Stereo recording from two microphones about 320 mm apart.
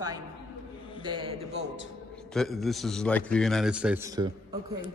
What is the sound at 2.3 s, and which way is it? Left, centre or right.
A man's voice, centre.